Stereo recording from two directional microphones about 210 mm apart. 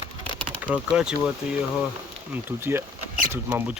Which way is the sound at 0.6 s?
5° right (ahead or behind).